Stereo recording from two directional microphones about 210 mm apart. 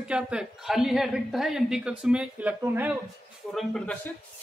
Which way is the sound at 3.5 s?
5° left (ahead or behind).